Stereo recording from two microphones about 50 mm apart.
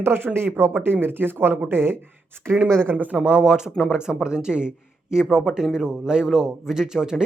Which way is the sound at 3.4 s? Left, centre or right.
Centre.